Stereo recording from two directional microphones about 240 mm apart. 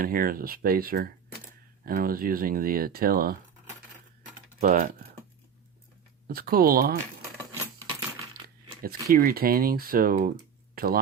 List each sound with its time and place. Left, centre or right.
0.0 s speech: right
4.6 s speech: right
6.2 s speech: right
8.8 s speech: right